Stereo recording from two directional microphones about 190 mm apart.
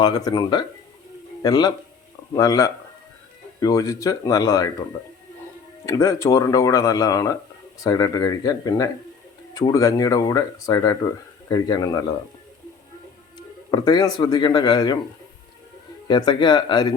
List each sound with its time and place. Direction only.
0.0 s speech: 20° left (ahead or behind)
5.8 s speech: 15° left (ahead or behind)
13.7 s speech: 20° left (ahead or behind)
16.0 s speech: 25° left (ahead or behind)